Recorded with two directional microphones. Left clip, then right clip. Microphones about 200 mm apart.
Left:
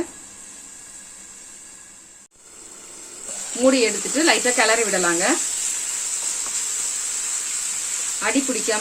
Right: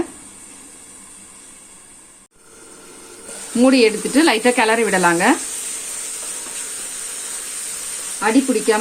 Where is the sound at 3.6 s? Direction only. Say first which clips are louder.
Right 4 dB; 50° right (ahead or behind).